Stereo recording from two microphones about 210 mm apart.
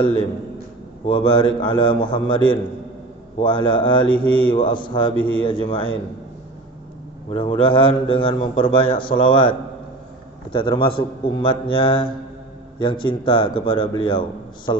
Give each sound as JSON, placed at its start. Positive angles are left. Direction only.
{"t": 1.0, "sound": "a man's voice", "side_deg": 25}
{"t": 7.2, "sound": "a man's voice", "side_deg": 25}